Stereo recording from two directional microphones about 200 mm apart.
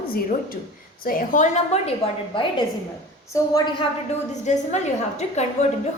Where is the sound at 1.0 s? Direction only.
45° left (ahead or behind).